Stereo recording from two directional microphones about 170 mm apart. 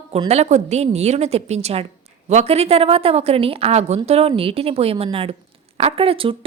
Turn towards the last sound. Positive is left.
turn(degrees=-35)  # may be behind; listen again after turning